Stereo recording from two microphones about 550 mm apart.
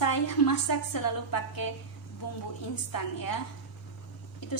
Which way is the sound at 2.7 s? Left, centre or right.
Left.